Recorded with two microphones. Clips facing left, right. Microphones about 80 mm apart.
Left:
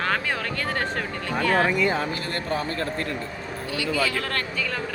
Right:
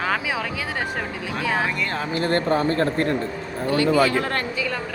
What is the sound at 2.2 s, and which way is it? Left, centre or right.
Speech, right.